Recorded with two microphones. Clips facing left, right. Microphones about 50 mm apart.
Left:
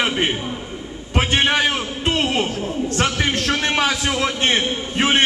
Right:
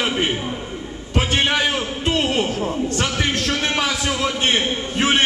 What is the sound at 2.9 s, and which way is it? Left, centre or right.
A man's voice, left.